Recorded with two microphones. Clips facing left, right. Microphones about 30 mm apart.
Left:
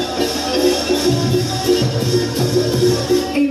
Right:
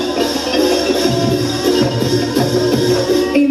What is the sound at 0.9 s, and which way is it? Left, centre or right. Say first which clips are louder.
Music: right 2 dB; centre.